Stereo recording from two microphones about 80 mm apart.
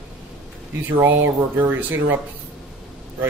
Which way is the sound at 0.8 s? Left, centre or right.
Right.